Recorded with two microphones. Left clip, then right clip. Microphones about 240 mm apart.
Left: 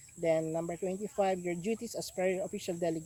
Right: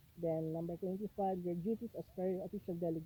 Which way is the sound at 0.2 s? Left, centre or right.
Centre.